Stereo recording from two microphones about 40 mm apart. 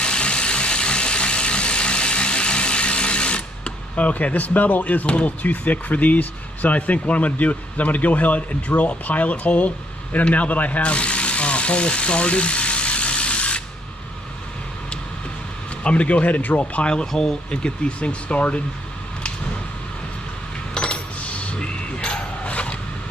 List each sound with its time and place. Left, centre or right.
0.0 s a sound: left
3.9 s speech: left
5.0 s speech: left
5.4 s speech: left
10.3 s a sound: left
15.8 s speech: left
16.7 s speech: left
17.0 s speech: centre; by 18.6 s left
20.7 s a sound: left